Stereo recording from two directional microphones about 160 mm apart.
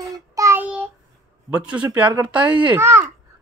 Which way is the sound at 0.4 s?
15° right (ahead or behind).